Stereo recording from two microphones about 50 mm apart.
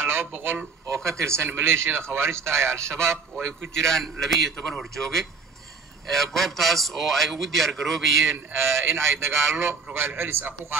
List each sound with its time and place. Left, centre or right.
0.0 s speech: right
1.0 s speech: right
3.8 s a man's voice: centre
8.5 s speech: right
9.9 s a man's voice: right